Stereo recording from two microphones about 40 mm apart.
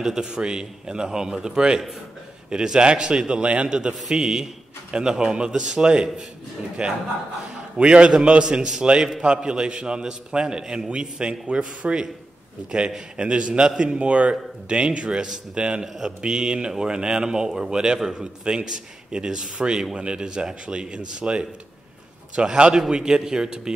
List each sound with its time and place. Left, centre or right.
0.0 s a man's voice: centre
13.2 s a man's voice: right